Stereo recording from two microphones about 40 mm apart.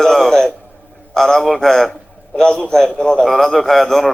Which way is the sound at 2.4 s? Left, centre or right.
Left.